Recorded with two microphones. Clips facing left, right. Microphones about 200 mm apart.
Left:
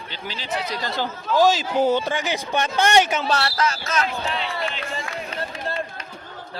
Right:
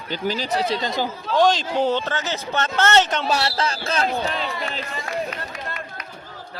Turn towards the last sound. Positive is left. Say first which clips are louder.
# left 4 dB
turn(degrees=30)  # may be behind; listen again after turning